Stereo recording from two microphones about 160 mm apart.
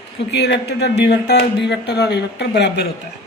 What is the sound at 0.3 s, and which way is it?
Speech, 90° left.